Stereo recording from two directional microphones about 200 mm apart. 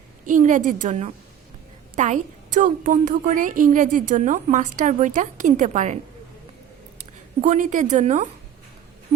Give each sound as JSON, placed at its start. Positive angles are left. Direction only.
{"t": 0.3, "sound": "a woman's voice", "side_deg": -40}
{"t": 7.4, "sound": "a woman's voice", "side_deg": -40}